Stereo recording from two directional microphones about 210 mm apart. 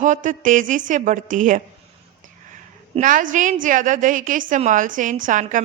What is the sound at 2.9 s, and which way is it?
A woman's voice, 40° right (ahead or behind).